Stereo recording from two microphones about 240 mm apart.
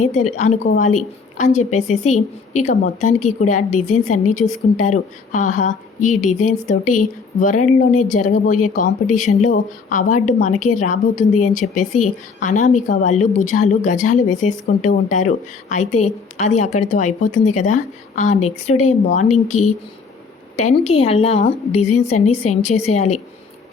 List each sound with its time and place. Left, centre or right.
0.0 s a woman's voice: left